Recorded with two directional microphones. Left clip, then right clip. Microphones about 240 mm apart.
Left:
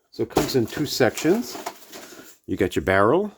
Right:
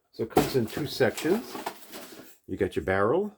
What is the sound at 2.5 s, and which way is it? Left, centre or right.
Speech, left.